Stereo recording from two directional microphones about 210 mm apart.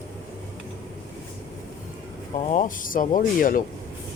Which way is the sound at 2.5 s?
40° left (ahead or behind).